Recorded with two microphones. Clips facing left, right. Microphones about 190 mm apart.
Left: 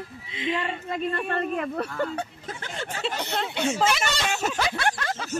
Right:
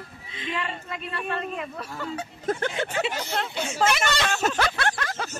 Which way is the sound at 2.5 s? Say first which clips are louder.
Right 9 dB; 60° right (ahead or behind).